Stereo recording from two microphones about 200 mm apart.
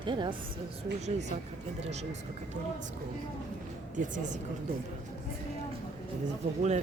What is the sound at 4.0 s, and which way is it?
Speech, 40° right (ahead or behind).